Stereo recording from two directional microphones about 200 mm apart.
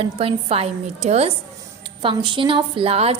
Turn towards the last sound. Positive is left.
turn(degrees=-30)  # may be behind; listen again after turning